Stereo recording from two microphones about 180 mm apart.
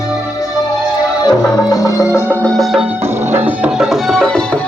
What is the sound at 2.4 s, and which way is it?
Music, centre (ahead or behind).